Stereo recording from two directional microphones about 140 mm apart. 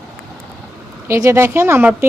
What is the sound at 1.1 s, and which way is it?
Speech, 20° right (ahead or behind).